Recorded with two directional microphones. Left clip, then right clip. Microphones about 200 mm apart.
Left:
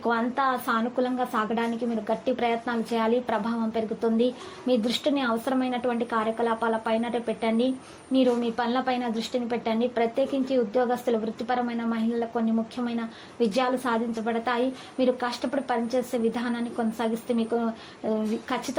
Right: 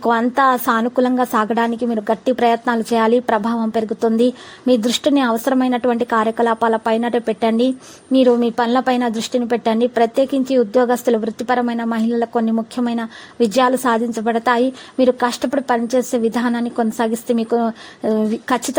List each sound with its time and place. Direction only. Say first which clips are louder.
0.0 s a woman's voice: right 10 dB; 45° right (ahead or behind)